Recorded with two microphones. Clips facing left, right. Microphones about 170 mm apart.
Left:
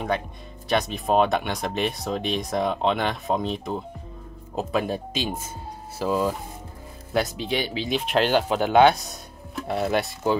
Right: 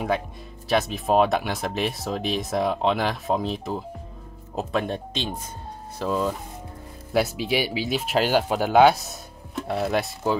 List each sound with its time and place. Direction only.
0.7 s speech: centre (ahead or behind)
7.1 s speech: 5° right (ahead or behind)